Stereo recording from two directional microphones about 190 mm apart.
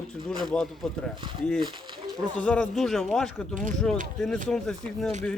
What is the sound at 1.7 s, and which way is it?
Speech, 25° right (ahead or behind).